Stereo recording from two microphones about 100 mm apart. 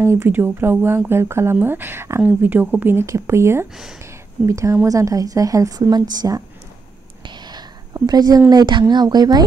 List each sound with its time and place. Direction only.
0.0 s speech: 25° right (ahead or behind)
3.7 s speech: 5° right (ahead or behind)
4.0 s a sound: 30° right (ahead or behind)
4.8 s a woman's voice: 35° right (ahead or behind)
7.2 s whispering: 45° right (ahead or behind)
8.5 s speech: 45° right (ahead or behind)